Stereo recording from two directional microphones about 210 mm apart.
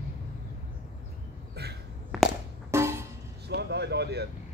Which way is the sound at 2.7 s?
10° right (ahead or behind).